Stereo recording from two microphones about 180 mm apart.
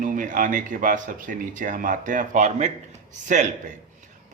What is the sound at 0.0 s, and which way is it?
A man's voice, 50° right (ahead or behind).